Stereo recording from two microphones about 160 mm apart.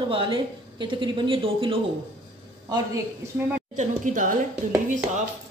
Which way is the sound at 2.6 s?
20° right (ahead or behind).